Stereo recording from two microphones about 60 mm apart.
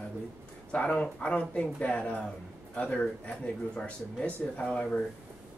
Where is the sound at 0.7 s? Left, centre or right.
Left.